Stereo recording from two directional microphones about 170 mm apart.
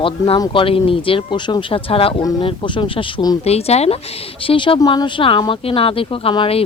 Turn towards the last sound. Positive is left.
turn(degrees=30)  # may be behind; listen again after turning